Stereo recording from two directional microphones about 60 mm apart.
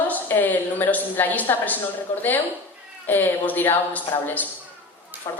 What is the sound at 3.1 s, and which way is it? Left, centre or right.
Speech, left.